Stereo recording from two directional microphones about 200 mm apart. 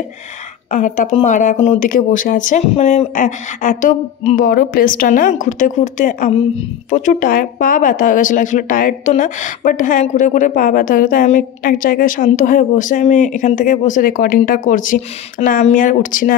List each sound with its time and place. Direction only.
0.7 s speech: 40° left (ahead or behind)